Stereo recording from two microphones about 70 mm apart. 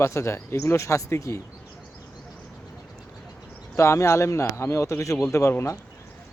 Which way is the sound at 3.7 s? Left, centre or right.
Left.